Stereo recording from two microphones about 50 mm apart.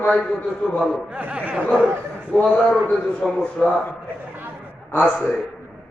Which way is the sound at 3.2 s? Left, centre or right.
Centre.